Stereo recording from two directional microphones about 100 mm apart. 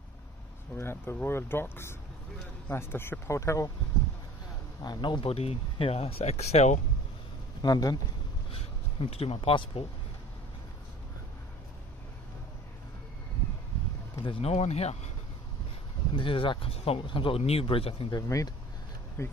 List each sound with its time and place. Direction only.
0.7 s speech: 25° left (ahead or behind)
4.8 s speech: 45° left (ahead or behind)
5.3 s speech: 80° left
7.6 s a man's voice: 40° left (ahead or behind)
8.5 s speech: 75° left (ahead or behind)
14.2 s speech: 90° left
16.2 s speech: 60° left (ahead or behind)
18.1 s a man's voice: 35° left (ahead or behind)